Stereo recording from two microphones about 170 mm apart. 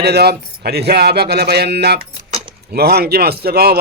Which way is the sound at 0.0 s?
70° right (ahead or behind).